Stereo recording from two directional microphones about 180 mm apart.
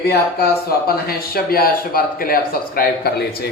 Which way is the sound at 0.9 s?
55° left (ahead or behind).